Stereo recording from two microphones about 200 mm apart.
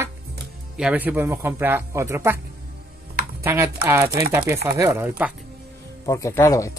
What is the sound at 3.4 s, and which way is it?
A man's voice, 15° right (ahead or behind).